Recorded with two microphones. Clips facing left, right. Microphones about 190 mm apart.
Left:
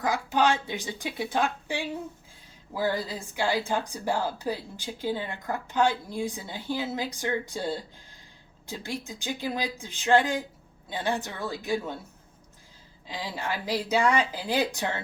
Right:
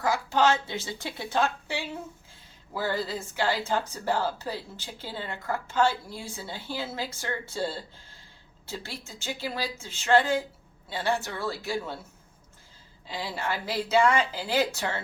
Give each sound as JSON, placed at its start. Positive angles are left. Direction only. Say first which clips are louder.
{"t": 0.0, "sound": "a woman's voice", "louder": "right 1 dB", "side_deg": 15}
{"t": 13.1, "sound": "a woman's voice", "louder": "right 1 dB", "side_deg": 15}